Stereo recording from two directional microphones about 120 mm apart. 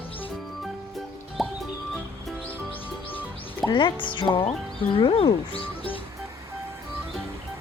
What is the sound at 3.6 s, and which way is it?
Speech, 40° left (ahead or behind).